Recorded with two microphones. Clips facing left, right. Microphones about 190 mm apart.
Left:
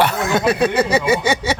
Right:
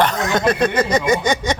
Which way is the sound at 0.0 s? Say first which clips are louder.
Even; 5° left (ahead or behind).